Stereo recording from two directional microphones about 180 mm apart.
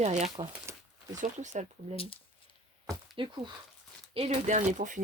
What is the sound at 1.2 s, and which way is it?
Speech, 40° right (ahead or behind).